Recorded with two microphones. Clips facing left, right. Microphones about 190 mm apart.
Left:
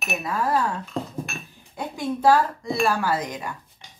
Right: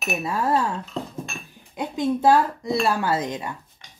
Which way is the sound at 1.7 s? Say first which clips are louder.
Right 4 dB; 20° right (ahead or behind).